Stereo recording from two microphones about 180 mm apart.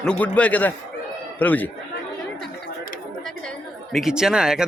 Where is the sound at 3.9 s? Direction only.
5° right (ahead or behind).